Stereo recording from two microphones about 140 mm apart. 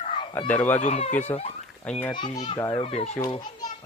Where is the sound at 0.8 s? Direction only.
55° left (ahead or behind).